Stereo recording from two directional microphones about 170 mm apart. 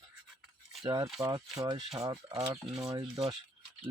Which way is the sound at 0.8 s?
20° right (ahead or behind).